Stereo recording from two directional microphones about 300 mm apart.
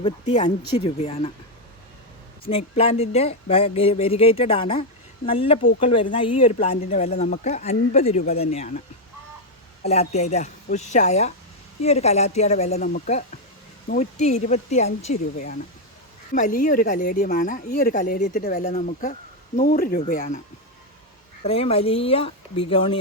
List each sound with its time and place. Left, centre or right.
0.0 s speech: centre
2.4 s speech: centre
9.8 s speech: left
16.3 s speech: left
21.4 s speech: centre